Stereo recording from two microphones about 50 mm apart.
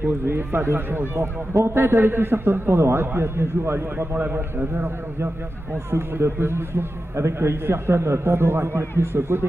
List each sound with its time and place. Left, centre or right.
0.3 s a man's voice: right
1.1 s a man's voice: right